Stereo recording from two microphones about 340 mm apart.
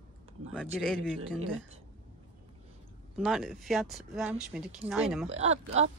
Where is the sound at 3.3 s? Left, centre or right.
Centre.